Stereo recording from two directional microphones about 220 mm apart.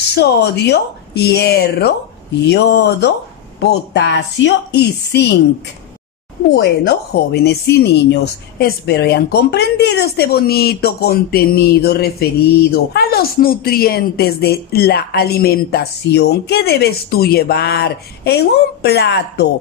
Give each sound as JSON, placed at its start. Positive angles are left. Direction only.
{"t": 0.1, "sound": "a woman's voice", "side_deg": 50}
{"t": 6.5, "sound": "a woman's voice", "side_deg": 50}